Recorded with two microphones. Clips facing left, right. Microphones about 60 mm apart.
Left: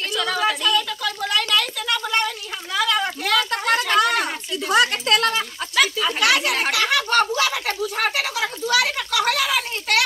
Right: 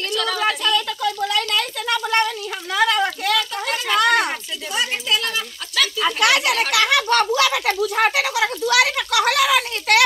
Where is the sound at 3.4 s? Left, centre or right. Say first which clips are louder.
Left 3 dB; left.